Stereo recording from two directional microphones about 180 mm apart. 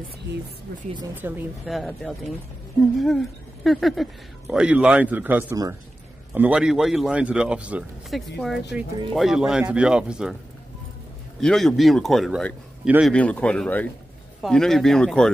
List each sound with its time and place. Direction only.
0.7 s speech: 60° right (ahead or behind)
1.1 s speech: 10° right (ahead or behind)
1.7 s speech: centre (ahead or behind)
11.4 s speech: centre (ahead or behind)
13.1 s speech: 5° left (ahead or behind)